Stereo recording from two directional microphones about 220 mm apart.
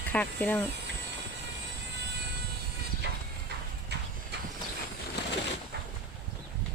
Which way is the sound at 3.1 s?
45° right (ahead or behind).